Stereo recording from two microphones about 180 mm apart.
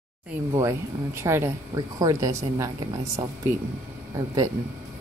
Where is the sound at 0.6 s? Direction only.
15° right (ahead or behind).